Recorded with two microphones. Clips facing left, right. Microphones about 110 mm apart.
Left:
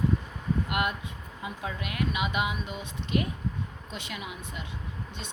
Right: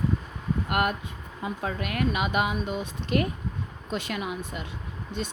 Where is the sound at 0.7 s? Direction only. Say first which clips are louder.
Right 4 dB; 50° right (ahead or behind).